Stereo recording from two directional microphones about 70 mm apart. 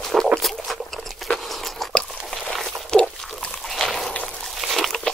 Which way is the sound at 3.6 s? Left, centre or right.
Centre.